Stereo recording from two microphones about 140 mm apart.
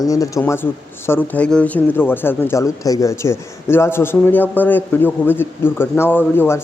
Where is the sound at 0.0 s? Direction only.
25° left (ahead or behind).